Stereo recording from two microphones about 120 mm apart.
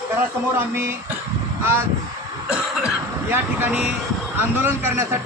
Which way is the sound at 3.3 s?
15° right (ahead or behind).